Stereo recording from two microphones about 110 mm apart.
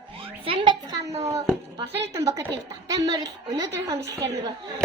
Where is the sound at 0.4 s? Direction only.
45° right (ahead or behind).